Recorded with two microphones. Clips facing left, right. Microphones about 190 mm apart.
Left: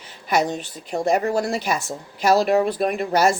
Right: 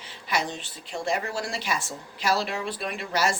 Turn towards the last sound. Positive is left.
turn(degrees=45)  # may be behind; listen again after turning